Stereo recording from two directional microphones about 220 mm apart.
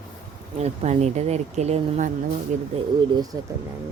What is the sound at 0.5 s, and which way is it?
Speech, 30° right (ahead or behind).